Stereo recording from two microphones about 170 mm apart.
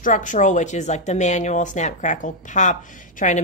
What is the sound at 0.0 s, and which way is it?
Speech, 50° left (ahead or behind).